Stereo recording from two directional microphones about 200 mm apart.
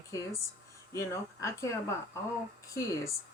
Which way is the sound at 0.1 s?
15° left (ahead or behind).